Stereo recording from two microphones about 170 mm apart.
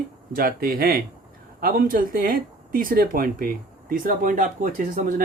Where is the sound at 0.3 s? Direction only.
60° right (ahead or behind).